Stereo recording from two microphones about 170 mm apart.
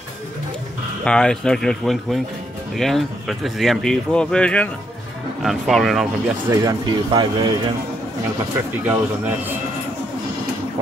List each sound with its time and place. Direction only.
1.0 s speech: 5° left (ahead or behind)
6.5 s speech: 20° right (ahead or behind)
8.8 s a man's voice: 10° right (ahead or behind)